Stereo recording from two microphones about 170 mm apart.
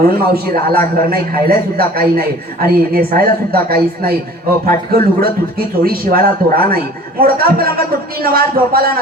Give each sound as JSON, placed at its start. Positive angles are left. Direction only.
{"t": 0.0, "sound": "a man's voice", "side_deg": -60}